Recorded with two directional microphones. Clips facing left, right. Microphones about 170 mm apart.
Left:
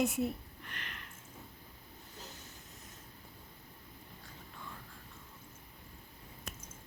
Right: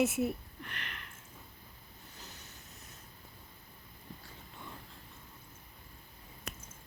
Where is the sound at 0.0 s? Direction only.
5° right (ahead or behind).